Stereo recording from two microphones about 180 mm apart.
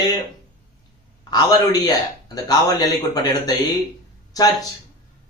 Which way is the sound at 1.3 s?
20° left (ahead or behind).